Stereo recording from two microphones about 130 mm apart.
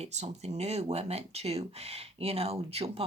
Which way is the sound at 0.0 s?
60° right (ahead or behind).